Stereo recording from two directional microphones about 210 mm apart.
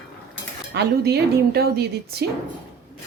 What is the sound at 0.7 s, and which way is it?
Speech, 50° right (ahead or behind).